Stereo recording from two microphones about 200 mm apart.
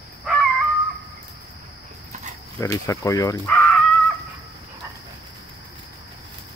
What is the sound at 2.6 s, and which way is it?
Speech, 15° left (ahead or behind).